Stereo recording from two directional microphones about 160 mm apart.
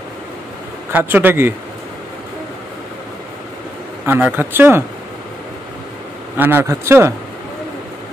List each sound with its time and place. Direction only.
0.9 s speech: 10° right (ahead or behind)
4.0 s speech: 10° right (ahead or behind)
6.3 s speech: 10° right (ahead or behind)